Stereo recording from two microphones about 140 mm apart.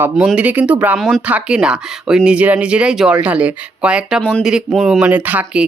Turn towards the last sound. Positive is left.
turn(degrees=-10)  # may be behind; listen again after turning